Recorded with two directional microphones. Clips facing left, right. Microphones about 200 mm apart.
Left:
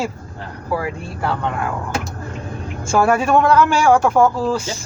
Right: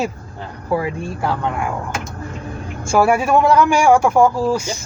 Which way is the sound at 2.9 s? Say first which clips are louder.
Right 1 dB; 10° right (ahead or behind).